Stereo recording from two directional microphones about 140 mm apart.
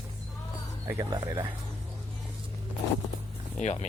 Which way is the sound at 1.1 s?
30° right (ahead or behind).